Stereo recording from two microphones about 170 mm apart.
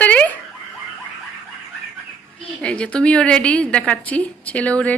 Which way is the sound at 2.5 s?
5° left (ahead or behind).